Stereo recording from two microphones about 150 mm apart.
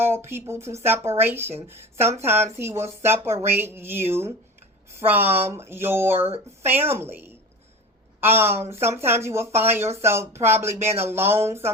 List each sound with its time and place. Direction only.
0.0 s speech: 15° right (ahead or behind)
8.4 s speech: 15° right (ahead or behind)